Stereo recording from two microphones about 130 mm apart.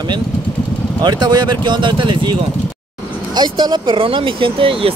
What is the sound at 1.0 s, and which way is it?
Speech, 35° right (ahead or behind).